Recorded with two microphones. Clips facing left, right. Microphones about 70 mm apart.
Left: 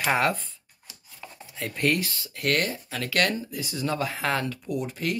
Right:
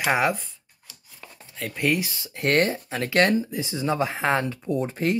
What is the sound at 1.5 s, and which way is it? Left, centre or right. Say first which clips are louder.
Speech: right 1 dB; centre.